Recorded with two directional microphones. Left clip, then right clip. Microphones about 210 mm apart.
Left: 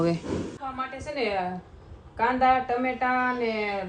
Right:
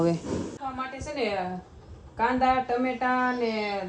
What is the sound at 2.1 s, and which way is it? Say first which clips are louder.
A woman's voice: left 2 dB; centre (ahead or behind).